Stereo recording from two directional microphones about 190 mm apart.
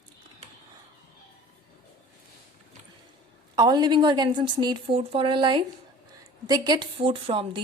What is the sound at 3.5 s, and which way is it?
A woman's voice, 20° right (ahead or behind).